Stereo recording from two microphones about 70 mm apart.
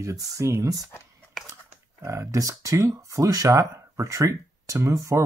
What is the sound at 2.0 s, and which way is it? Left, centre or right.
Speech, right.